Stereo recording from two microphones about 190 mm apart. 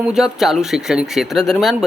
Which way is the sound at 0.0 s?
Centre (ahead or behind).